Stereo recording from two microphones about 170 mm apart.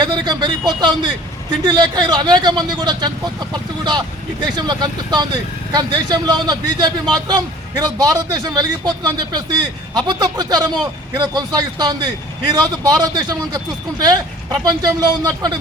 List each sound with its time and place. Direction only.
0.0 s a man's voice: 25° right (ahead or behind)